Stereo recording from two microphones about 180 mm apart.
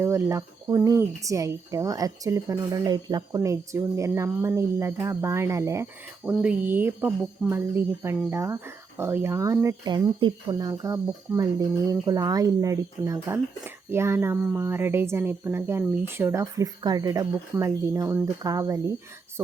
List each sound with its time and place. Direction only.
0.0 s speech: 15° right (ahead or behind)